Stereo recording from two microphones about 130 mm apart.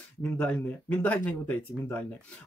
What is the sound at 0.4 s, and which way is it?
Speech, 10° left (ahead or behind).